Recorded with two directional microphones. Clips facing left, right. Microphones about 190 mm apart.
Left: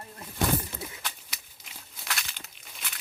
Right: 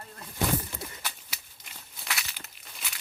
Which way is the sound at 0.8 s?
Centre (ahead or behind).